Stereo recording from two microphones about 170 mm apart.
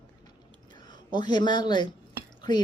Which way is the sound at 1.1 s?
25° left (ahead or behind).